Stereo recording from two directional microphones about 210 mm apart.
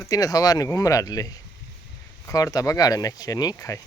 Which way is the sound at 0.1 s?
15° left (ahead or behind).